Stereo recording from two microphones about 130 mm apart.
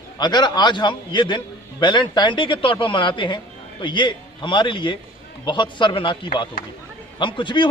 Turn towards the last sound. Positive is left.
turn(degrees=40)  # may be behind; listen again after turning